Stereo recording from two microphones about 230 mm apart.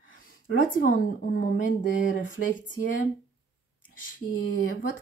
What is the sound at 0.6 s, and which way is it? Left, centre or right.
Speech, left.